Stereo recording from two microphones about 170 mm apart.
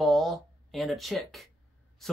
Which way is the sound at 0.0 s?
Centre (ahead or behind).